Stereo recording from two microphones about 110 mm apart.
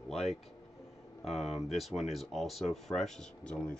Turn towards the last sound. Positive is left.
turn(degrees=5)  # may be behind; listen again after turning